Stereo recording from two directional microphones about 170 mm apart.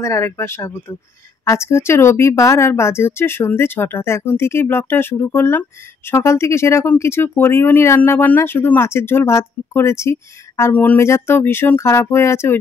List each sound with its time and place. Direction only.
0.0 s speech: 15° left (ahead or behind)